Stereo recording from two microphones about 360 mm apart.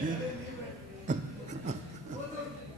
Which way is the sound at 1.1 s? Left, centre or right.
Centre.